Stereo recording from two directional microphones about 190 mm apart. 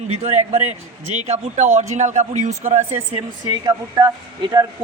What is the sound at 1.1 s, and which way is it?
Speech, 35° right (ahead or behind).